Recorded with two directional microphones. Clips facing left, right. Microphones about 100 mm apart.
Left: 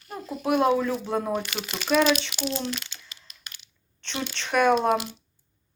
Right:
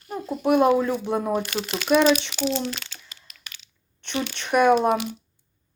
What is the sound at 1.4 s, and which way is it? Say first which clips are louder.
Speech: right 5 dB; 45° right (ahead or behind).